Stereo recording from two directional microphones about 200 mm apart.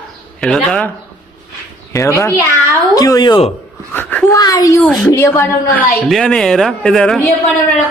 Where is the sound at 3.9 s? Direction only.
10° left (ahead or behind).